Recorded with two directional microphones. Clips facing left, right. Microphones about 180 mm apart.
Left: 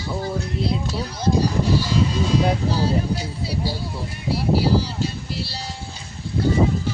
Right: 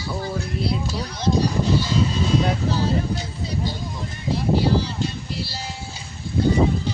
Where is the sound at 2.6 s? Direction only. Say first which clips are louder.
Left 1 dB; 10° left (ahead or behind).